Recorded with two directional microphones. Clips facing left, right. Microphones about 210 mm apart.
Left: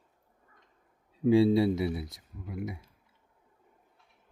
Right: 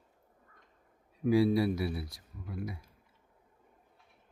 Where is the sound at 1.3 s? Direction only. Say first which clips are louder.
Left 4 dB; 25° left (ahead or behind).